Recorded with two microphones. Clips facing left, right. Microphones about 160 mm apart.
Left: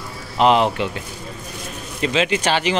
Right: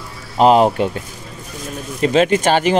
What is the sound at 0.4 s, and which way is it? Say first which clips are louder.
Speech: right 4 dB; 40° right (ahead or behind).